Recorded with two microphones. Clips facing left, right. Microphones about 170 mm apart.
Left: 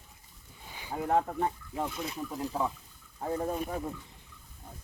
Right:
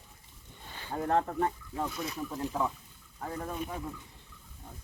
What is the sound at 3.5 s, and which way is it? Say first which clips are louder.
Speech: left 3 dB; 40° left (ahead or behind).